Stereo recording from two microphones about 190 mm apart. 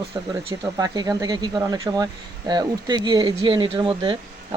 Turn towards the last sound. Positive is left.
turn(degrees=-25)  # may be behind; listen again after turning